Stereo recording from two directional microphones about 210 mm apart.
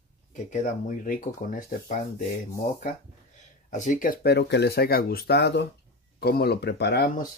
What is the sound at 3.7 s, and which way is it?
Speech, 40° left (ahead or behind).